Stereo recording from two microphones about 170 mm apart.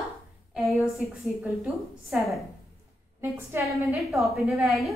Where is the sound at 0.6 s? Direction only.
Centre (ahead or behind).